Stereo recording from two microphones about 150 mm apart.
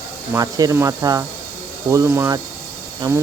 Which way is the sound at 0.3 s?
20° right (ahead or behind).